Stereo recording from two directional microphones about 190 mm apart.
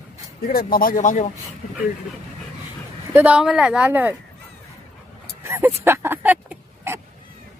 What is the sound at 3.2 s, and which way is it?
Speech, 5° right (ahead or behind).